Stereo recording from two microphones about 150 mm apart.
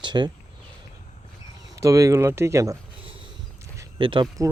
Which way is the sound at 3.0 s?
35° right (ahead or behind).